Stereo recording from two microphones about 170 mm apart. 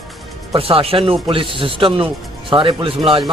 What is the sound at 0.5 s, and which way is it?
Speech, 35° right (ahead or behind).